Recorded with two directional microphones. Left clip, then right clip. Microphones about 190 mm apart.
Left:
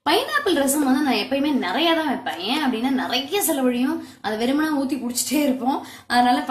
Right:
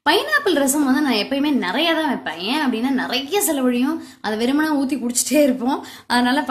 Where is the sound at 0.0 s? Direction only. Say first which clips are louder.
Right 3 dB; 55° right (ahead or behind).